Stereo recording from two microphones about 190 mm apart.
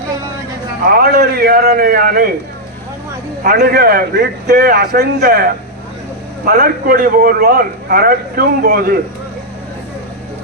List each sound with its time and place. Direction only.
0.9 s a man's voice: 55° right (ahead or behind)
3.4 s a man's voice: 50° right (ahead or behind)